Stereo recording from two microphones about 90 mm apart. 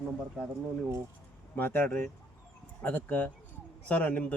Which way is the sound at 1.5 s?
25° left (ahead or behind).